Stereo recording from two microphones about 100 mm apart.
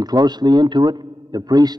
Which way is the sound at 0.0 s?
40° right (ahead or behind).